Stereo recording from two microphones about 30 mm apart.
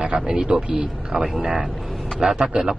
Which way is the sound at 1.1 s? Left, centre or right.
Centre.